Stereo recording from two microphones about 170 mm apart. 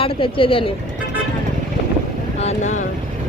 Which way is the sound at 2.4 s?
45° left (ahead or behind).